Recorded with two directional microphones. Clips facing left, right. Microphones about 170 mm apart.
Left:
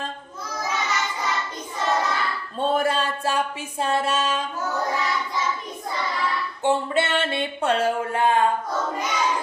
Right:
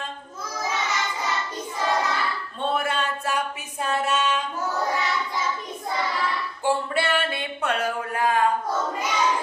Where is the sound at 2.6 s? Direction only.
35° left (ahead or behind).